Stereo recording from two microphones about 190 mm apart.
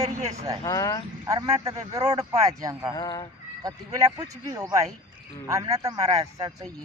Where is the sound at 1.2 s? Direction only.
20° right (ahead or behind).